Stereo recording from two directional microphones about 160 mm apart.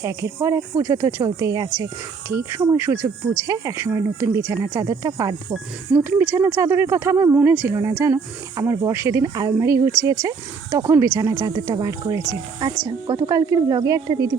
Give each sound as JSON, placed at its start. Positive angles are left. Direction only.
{"t": 0.0, "sound": "speech", "side_deg": -15}